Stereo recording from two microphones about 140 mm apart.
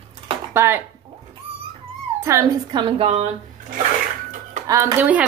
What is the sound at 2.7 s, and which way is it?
Speech, 35° right (ahead or behind).